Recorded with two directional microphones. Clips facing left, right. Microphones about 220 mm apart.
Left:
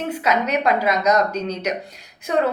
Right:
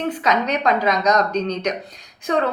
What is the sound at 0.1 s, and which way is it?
A woman's voice, 10° left (ahead or behind).